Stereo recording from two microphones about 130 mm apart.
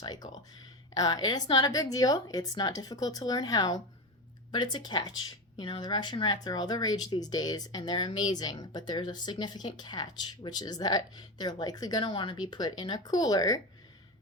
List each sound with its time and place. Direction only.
0.0 s a woman's voice: 30° left (ahead or behind)